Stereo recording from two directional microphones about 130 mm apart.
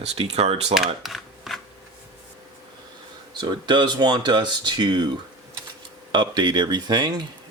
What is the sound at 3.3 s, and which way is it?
Speech, 35° right (ahead or behind).